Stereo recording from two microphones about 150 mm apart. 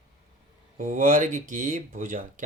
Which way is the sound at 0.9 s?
60° right (ahead or behind).